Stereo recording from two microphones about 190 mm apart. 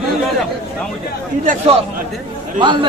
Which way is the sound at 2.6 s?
25° right (ahead or behind).